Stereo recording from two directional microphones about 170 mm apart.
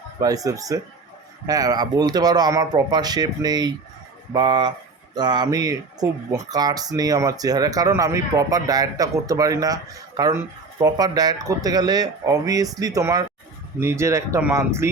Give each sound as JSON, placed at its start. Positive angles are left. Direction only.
{"t": 0.2, "sound": "speech", "side_deg": -20}